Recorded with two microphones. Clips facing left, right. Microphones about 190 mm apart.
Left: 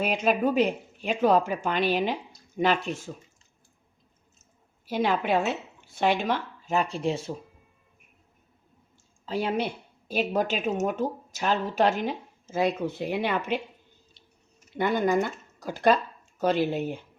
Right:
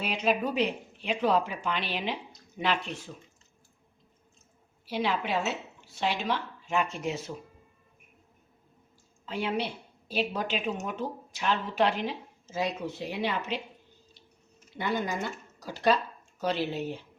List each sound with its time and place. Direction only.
0.0 s speech: 50° left (ahead or behind)
4.9 s speech: 45° left (ahead or behind); by 7.3 s 30° left (ahead or behind)
9.2 s speech: 40° left (ahead or behind); by 13.6 s 55° left (ahead or behind)
14.7 s speech: 50° left (ahead or behind)